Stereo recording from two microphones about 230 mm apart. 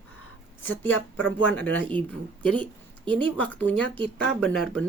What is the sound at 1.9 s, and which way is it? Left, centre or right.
Speech, right.